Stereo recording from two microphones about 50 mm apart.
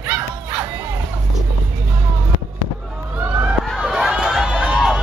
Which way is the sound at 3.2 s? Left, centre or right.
Right.